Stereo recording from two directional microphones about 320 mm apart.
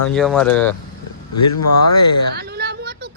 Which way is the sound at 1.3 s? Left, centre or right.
Left.